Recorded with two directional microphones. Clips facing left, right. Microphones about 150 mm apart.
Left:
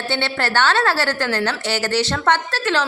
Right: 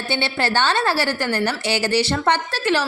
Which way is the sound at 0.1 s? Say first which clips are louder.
Even; 15° right (ahead or behind).